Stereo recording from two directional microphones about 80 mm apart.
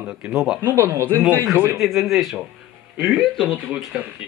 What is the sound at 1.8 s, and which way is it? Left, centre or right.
Speech, centre.